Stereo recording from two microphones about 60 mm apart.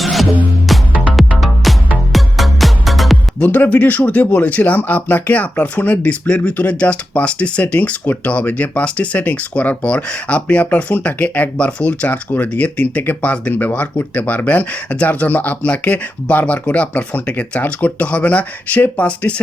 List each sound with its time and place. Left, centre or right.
0.0 s music: centre
3.4 s speech: left